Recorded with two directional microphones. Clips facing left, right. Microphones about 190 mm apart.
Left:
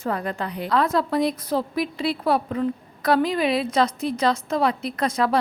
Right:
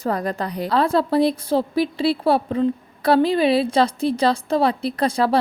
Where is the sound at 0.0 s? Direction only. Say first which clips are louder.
Right 3 dB; 40° right (ahead or behind).